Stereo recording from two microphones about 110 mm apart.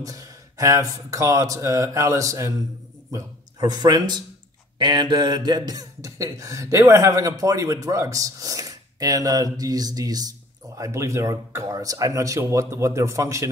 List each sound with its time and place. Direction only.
0.0 s a man's voice: 30° right (ahead or behind)